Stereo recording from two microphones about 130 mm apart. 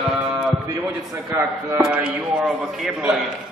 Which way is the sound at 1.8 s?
5° right (ahead or behind).